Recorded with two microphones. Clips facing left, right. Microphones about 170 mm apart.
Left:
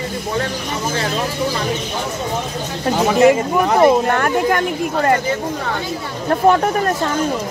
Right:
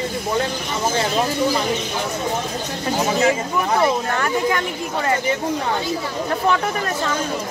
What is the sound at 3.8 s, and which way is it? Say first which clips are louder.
Speech: left 6 dB; 55° left (ahead or behind).